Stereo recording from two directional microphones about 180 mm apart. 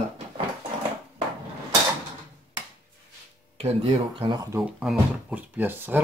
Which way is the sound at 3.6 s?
35° right (ahead or behind).